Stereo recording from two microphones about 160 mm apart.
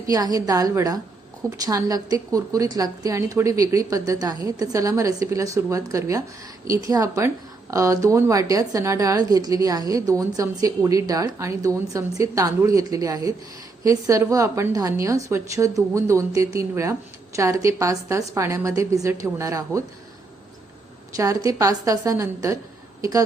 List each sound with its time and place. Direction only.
0.1 s a woman's voice: 25° right (ahead or behind)
21.2 s a woman's voice: 20° right (ahead or behind)